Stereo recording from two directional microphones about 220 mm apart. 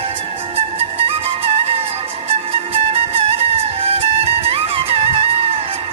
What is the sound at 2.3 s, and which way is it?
Music, 25° right (ahead or behind).